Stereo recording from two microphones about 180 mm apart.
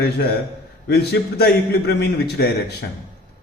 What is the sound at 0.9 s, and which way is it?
A man's voice, 65° left (ahead or behind).